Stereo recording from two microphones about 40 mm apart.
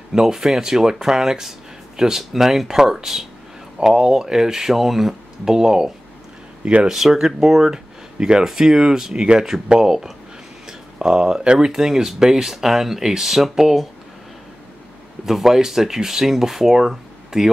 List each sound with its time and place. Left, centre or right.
0.1 s speech: centre
6.6 s speech: right
6.9 s speech: centre
15.2 s speech: centre